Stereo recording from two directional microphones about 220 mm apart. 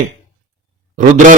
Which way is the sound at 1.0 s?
35° right (ahead or behind).